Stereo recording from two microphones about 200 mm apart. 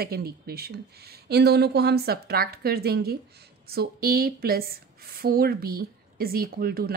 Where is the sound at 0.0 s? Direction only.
50° right (ahead or behind).